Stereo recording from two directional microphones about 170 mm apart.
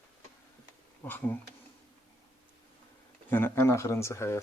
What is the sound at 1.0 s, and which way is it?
Speech, 10° left (ahead or behind).